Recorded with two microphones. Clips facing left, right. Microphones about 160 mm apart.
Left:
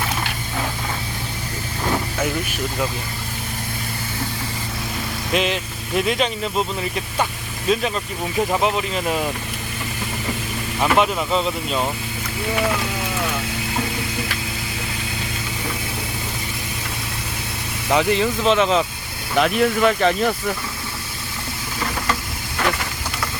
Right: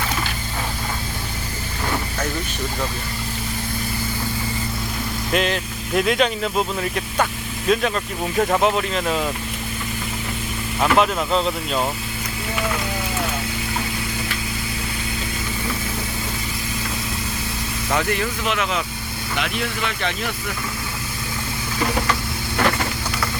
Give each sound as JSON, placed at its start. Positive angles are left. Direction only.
{"t": 5.3, "sound": "speech", "side_deg": 0}
{"t": 10.8, "sound": "speech", "side_deg": 0}
{"t": 17.9, "sound": "speech", "side_deg": 20}
{"t": 19.4, "sound": "speech", "side_deg": 45}